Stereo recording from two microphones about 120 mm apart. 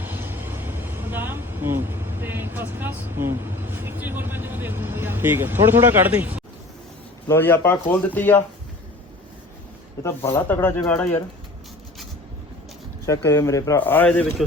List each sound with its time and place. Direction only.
0.0 s vehicle: 15° right (ahead or behind)
7.3 s speech: 15° left (ahead or behind)
10.0 s speech: 20° left (ahead or behind)
13.1 s speech: 25° left (ahead or behind)